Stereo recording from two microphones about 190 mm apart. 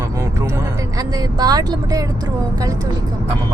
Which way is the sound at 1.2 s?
20° right (ahead or behind).